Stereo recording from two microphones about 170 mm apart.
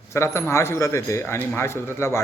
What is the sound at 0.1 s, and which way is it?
A man's voice, 15° left (ahead or behind).